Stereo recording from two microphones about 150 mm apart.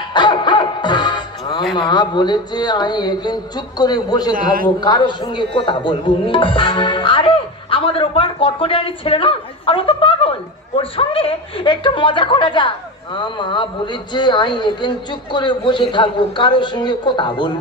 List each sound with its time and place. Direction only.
0.1 s music: 30° left (ahead or behind)
1.8 s speech: 30° left (ahead or behind)